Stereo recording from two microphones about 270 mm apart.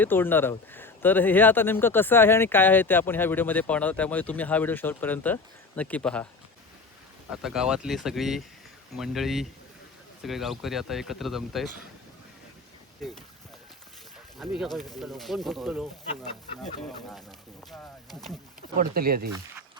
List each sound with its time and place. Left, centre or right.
0.0 s speech: centre
7.3 s speech: centre
14.3 s speech: centre
17.7 s speech: centre
18.8 s speech: right